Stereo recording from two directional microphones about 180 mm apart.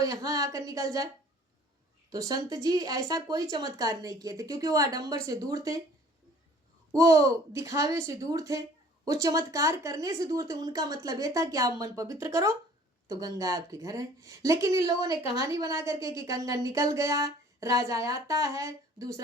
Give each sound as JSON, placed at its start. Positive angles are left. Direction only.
{"t": 0.0, "sound": "speech", "side_deg": -20}
{"t": 2.0, "sound": "speech", "side_deg": -20}
{"t": 6.9, "sound": "a woman's voice", "side_deg": -20}